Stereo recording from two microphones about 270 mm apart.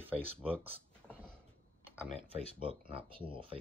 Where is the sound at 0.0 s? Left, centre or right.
Centre.